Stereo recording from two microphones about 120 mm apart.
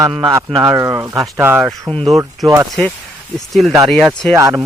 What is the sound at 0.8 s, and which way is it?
Speech, 25° right (ahead or behind).